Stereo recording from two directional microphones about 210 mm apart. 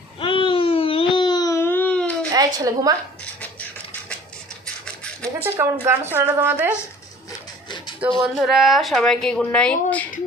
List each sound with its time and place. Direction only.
0.2 s babbling: 25° left (ahead or behind); by 2.1 s 5° left (ahead or behind)
2.3 s a woman's voice: 20° right (ahead or behind)
5.4 s a woman's voice: 10° right (ahead or behind)
7.3 s wood: 20° left (ahead or behind)
8.2 s a woman's voice: centre (ahead or behind)